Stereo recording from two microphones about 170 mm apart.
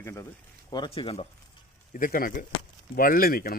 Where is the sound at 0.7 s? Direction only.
30° left (ahead or behind).